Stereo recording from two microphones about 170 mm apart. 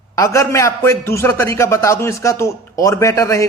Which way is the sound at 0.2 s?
20° left (ahead or behind).